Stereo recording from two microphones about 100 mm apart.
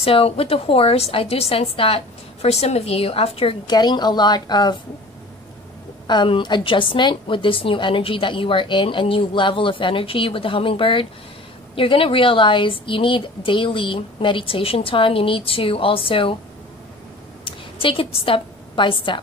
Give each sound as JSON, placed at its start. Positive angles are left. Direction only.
{"t": 0.0, "sound": "a woman's voice", "side_deg": 70}
{"t": 3.6, "sound": "a woman's voice", "side_deg": 45}
{"t": 6.0, "sound": "a woman's voice", "side_deg": 55}
{"t": 17.5, "sound": "a woman's voice", "side_deg": 60}